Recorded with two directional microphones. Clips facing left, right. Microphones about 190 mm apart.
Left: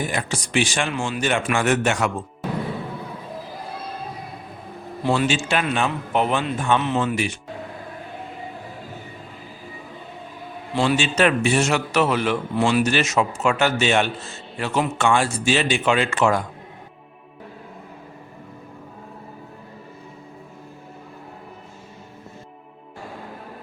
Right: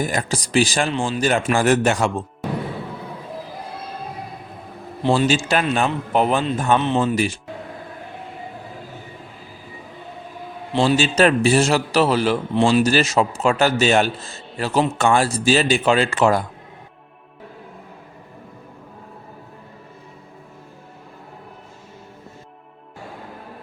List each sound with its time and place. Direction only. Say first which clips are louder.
0.0 s a man's voice: right 3 dB; 40° right (ahead or behind)
5.0 s a man's voice: right 3 dB; 35° right (ahead or behind)
10.8 s a man's voice: right 3 dB; 35° right (ahead or behind)